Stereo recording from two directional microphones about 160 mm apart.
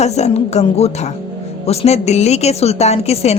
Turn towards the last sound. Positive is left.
turn(degrees=40)  # may be behind; listen again after turning